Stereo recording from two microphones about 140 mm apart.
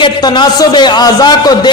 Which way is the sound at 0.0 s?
30° left (ahead or behind).